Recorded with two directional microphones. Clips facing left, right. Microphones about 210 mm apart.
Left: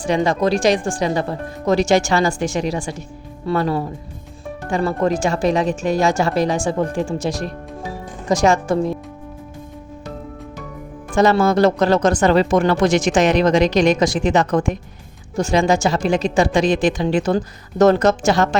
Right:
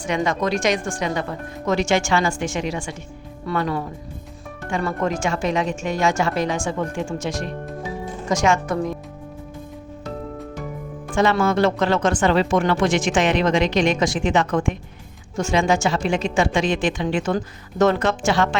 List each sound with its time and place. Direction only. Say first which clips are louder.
0.0 s speech: left 5 dB; 30° left (ahead or behind)
11.1 s speech: left 4 dB; 40° left (ahead or behind)